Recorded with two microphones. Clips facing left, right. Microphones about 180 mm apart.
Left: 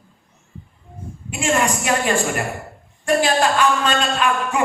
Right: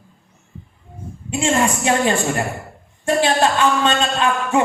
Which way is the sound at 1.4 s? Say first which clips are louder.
Right 1 dB; 25° right (ahead or behind).